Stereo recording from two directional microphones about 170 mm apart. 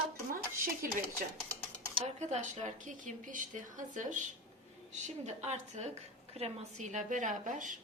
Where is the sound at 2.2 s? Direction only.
45° right (ahead or behind).